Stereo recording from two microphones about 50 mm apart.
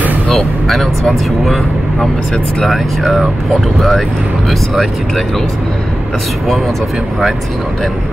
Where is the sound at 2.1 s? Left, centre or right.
Centre.